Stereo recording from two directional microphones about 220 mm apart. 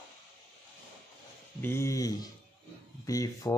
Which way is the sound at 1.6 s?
10° left (ahead or behind).